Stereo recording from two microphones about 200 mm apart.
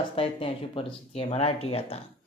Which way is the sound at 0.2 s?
25° left (ahead or behind).